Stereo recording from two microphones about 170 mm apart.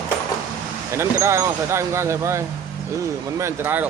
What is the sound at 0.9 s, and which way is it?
Speech, 15° right (ahead or behind).